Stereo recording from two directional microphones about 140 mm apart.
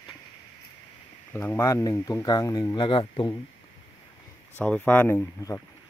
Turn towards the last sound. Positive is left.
turn(degrees=15)  # may be behind; listen again after turning